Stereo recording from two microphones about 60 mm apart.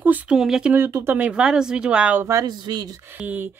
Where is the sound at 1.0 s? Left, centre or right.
Right.